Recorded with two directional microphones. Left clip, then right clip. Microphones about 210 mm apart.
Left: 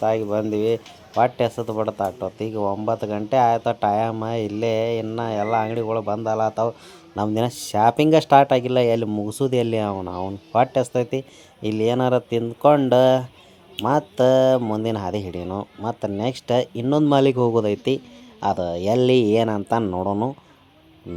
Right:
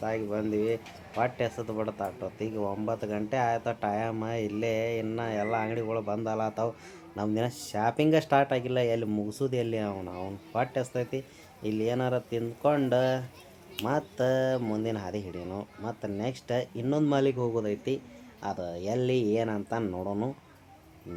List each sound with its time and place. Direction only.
0.0 s speech: 35° left (ahead or behind)
7.2 s speech: 35° left (ahead or behind)